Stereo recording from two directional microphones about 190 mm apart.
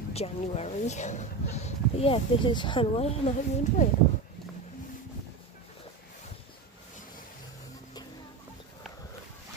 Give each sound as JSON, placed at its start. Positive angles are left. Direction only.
{"t": 0.1, "sound": "speech", "side_deg": 35}